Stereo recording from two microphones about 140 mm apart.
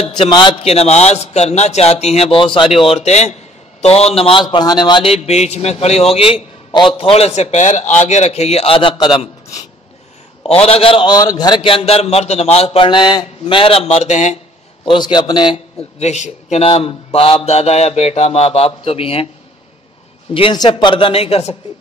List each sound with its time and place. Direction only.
0.0 s a man's voice: 45° left (ahead or behind)
10.5 s a man's voice: 45° left (ahead or behind)
14.9 s speech: 35° left (ahead or behind)
16.0 s a man's voice: 55° left (ahead or behind)
16.6 s a man's voice: 45° left (ahead or behind)
20.3 s speech: 35° left (ahead or behind)